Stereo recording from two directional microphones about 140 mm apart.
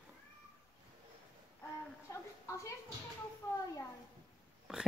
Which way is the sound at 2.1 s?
20° left (ahead or behind).